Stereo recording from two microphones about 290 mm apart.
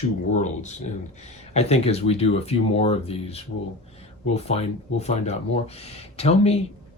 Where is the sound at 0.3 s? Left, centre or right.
Left.